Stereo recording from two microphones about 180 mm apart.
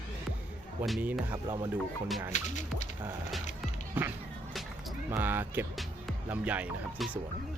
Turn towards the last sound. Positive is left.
turn(degrees=-10)  # may be behind; listen again after turning